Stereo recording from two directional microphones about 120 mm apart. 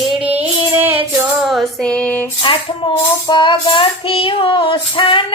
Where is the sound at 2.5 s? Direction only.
45° left (ahead or behind).